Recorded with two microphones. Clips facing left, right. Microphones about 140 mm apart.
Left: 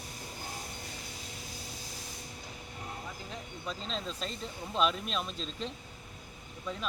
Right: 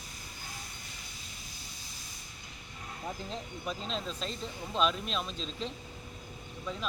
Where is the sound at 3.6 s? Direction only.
5° right (ahead or behind).